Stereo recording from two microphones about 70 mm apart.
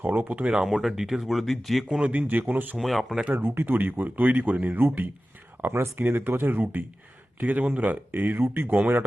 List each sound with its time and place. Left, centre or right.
0.0 s speech: right; by 1.8 s centre
1.9 s speech: centre
2.2 s speech: right
2.7 s speech: centre
3.3 s speech: right